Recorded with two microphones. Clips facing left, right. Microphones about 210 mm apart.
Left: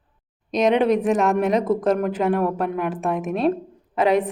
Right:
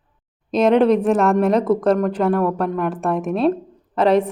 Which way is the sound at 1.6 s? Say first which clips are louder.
Right 3 dB; 20° left (ahead or behind).